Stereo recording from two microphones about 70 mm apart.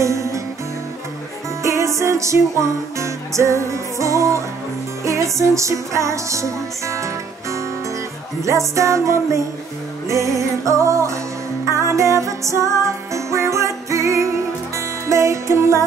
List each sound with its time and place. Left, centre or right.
0.0 s music: right
1.6 s music: right
8.5 s music: right